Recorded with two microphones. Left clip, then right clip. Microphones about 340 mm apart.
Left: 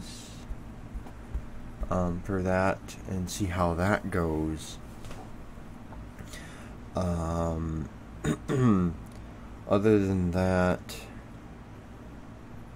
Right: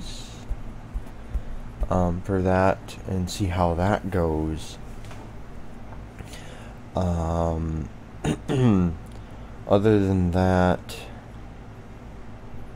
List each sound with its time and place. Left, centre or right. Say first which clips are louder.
1.9 s speech: right 6 dB; centre
6.9 s speech: right 5 dB; centre